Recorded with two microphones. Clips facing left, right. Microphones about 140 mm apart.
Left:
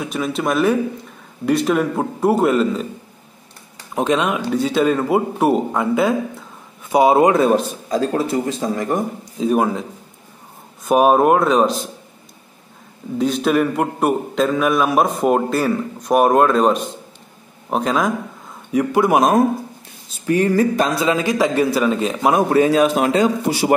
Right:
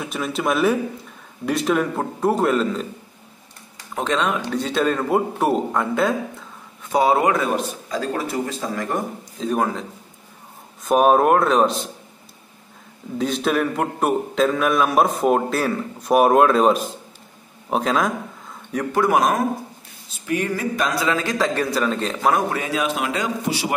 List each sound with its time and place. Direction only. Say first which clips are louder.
0.0 s a man's voice: left 3 dB; centre (ahead or behind)
3.7 s a man's voice: left 5 dB; 15° left (ahead or behind)
6.9 s speech: left 5 dB; 15° left (ahead or behind)
9.4 s speech: left 5 dB; 10° left (ahead or behind)
10.9 s a man's voice: left 2 dB; 5° left (ahead or behind)
13.2 s a man's voice: left 4 dB; centre (ahead or behind); by 19.4 s 20° left (ahead or behind)
20.2 s speech: left 7 dB; 35° left (ahead or behind); by 22.4 s 10° left (ahead or behind)
22.5 s a man's voice: left 10 dB; 35° left (ahead or behind)